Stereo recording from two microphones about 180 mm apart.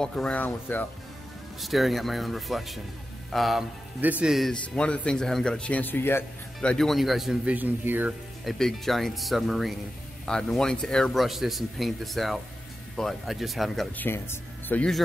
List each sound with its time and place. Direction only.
0.0 s speech: 5° left (ahead or behind)
1.6 s speech: centre (ahead or behind)
8.5 s speech: centre (ahead or behind)
14.0 s speech: 10° left (ahead or behind)